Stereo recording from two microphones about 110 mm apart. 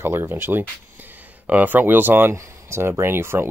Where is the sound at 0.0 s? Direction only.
20° right (ahead or behind).